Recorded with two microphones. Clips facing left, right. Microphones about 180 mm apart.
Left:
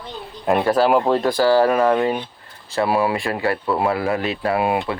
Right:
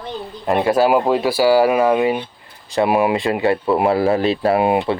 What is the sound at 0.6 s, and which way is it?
Speech, 10° right (ahead or behind).